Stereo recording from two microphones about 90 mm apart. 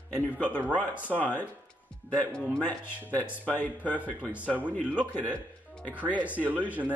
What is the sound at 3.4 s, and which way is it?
Speech, 20° left (ahead or behind).